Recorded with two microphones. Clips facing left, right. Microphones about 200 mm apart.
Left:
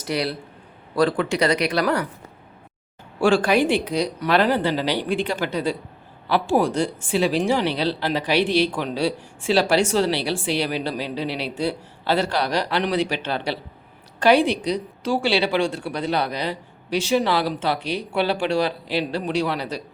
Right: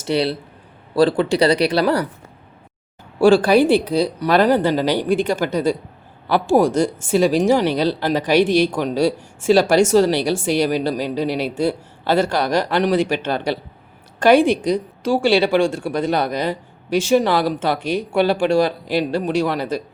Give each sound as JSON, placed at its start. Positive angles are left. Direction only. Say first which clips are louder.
{"t": 0.0, "sound": "speech", "louder": "right 5 dB", "side_deg": -30}
{"t": 3.2, "sound": "speech", "louder": "right 5 dB", "side_deg": -35}